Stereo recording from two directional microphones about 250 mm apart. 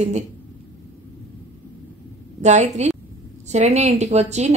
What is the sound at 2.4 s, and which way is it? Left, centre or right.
Speech, right.